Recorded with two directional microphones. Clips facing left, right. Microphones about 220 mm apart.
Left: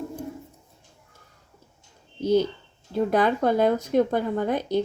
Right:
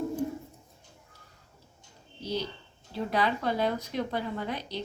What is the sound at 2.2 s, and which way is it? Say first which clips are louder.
A woman's voice: left 12 dB; 50° left (ahead or behind).